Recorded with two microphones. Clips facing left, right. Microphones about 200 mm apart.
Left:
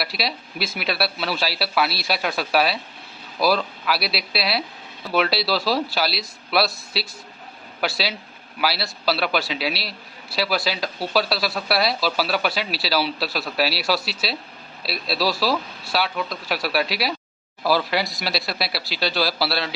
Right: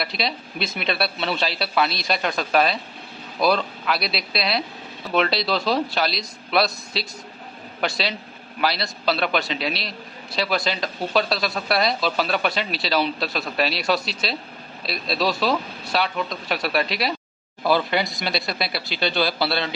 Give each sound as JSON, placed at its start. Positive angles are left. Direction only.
{"t": 0.0, "sound": "speech", "side_deg": 5}